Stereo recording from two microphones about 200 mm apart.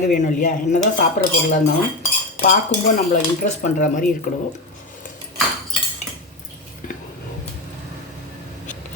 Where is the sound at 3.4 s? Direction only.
40° left (ahead or behind).